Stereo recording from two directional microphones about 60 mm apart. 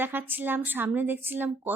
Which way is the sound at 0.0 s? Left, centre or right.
Right.